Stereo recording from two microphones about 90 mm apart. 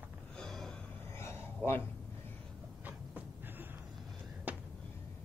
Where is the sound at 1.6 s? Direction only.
20° left (ahead or behind).